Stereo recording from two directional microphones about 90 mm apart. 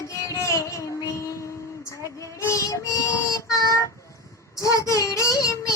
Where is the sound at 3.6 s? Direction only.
35° left (ahead or behind).